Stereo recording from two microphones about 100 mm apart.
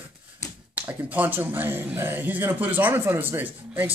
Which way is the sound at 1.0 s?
15° right (ahead or behind).